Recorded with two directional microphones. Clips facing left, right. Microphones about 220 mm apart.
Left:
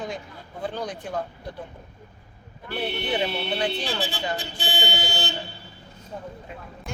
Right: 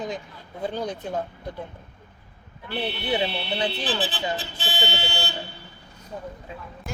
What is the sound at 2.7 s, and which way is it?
Speech, 45° left (ahead or behind).